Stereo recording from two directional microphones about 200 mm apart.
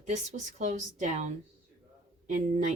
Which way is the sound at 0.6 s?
40° right (ahead or behind).